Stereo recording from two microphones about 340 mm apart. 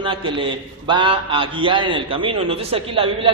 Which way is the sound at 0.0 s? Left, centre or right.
Centre.